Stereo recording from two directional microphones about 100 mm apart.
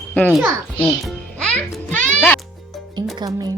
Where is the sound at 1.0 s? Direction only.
10° left (ahead or behind).